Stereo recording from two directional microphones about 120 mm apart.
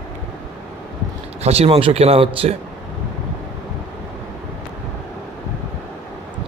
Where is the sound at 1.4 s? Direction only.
60° right (ahead or behind).